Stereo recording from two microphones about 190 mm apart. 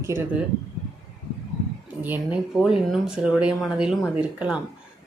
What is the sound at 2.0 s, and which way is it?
Speech, 5° right (ahead or behind).